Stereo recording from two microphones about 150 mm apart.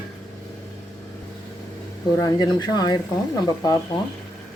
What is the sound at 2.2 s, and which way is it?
Speech, 25° left (ahead or behind).